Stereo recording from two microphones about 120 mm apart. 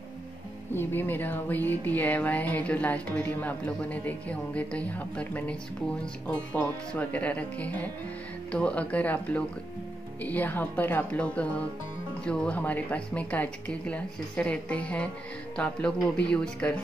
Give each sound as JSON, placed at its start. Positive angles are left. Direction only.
{"t": 0.7, "sound": "speech", "side_deg": 15}